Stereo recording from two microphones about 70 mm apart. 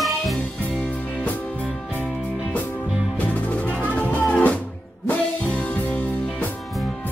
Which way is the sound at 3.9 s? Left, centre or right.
Centre.